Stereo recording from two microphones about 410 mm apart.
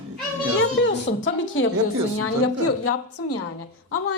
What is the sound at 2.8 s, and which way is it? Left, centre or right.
Speech, left.